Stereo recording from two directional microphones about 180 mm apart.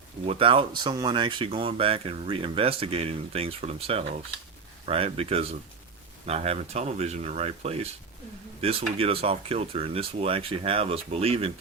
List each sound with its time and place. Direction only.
0.3 s speech: 30° right (ahead or behind)